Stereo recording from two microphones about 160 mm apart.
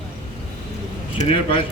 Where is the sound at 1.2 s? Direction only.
35° left (ahead or behind).